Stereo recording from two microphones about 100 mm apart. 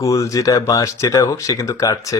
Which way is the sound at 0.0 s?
30° left (ahead or behind).